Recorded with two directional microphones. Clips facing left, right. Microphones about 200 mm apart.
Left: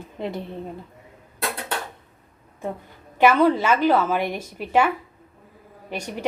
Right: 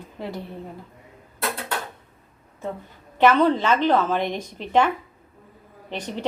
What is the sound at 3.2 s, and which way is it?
A woman's voice, 10° left (ahead or behind).